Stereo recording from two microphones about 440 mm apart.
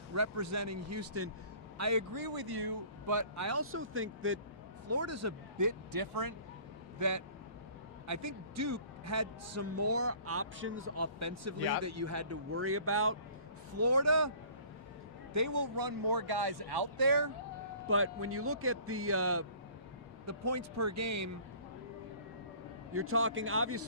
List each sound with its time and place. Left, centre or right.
0.1 s a man's voice: right
15.3 s speech: right
17.8 s a man's voice: right
22.9 s speech: right